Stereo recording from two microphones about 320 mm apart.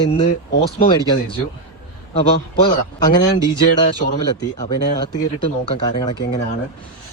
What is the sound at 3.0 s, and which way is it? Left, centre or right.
Speech, centre.